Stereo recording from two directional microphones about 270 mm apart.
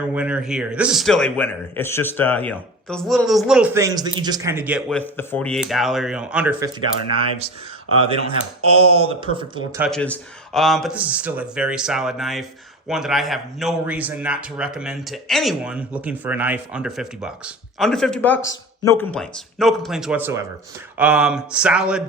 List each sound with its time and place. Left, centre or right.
0.0 s a man's voice: centre
8.0 s speech: centre
8.6 s speech: right
9.0 s speech: centre
9.8 s a man's voice: centre